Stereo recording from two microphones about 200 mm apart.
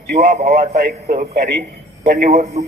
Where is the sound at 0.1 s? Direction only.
50° right (ahead or behind).